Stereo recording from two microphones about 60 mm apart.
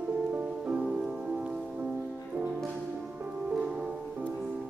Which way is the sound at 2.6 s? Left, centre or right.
Centre.